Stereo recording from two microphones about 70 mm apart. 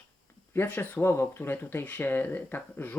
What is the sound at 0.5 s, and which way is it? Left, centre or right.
Speech, left.